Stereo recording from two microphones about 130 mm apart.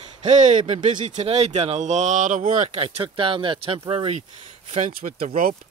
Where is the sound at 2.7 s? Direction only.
50° right (ahead or behind).